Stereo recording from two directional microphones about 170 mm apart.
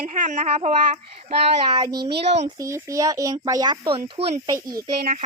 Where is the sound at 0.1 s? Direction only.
45° right (ahead or behind).